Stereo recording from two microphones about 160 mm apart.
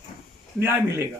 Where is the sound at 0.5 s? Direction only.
15° right (ahead or behind).